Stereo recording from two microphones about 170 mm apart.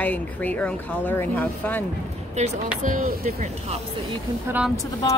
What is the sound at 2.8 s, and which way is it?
Speech, 50° right (ahead or behind).